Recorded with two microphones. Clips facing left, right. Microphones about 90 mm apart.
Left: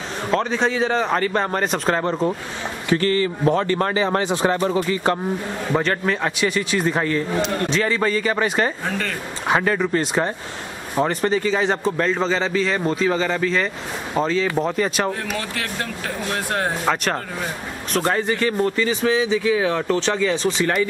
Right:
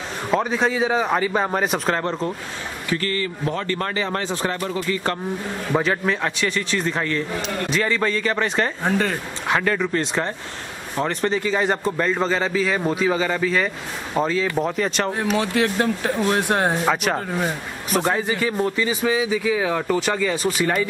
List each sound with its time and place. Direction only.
0.3 s a man's voice: 5° right (ahead or behind)
2.9 s speech: 25° left (ahead or behind)
5.7 s a man's voice: centre (ahead or behind)
8.8 s speech: 20° right (ahead or behind)
9.5 s a man's voice: 15° left (ahead or behind)
15.1 s speech: 20° right (ahead or behind)
16.8 s a man's voice: 5° right (ahead or behind)